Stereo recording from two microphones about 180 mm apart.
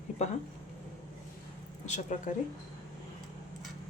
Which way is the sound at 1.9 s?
40° left (ahead or behind).